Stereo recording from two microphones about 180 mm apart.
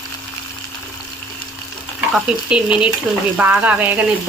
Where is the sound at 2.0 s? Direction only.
5° right (ahead or behind).